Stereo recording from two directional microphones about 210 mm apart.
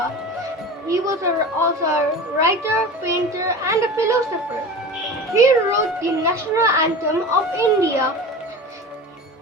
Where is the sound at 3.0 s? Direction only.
15° right (ahead or behind).